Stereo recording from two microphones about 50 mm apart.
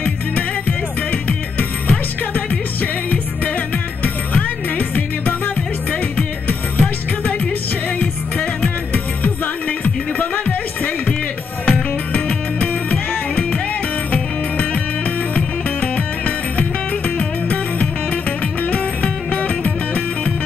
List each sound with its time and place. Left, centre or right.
0.0 s music: left